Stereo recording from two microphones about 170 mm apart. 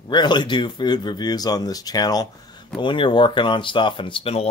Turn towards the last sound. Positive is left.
turn(degrees=35)  # may be behind; listen again after turning